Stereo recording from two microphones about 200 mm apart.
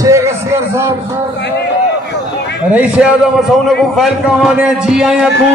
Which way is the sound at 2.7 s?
5° right (ahead or behind).